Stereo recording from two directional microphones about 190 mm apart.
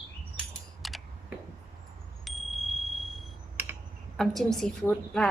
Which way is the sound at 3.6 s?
15° right (ahead or behind).